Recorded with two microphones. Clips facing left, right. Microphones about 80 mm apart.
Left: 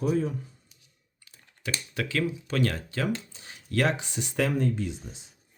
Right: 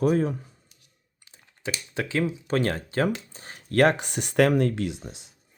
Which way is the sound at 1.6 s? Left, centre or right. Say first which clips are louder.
Right 2 dB; right.